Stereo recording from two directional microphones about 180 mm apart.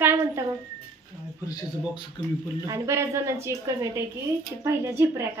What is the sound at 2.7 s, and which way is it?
A woman's voice, 15° right (ahead or behind).